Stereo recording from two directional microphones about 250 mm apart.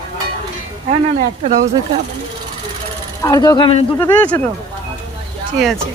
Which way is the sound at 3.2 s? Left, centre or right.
Centre.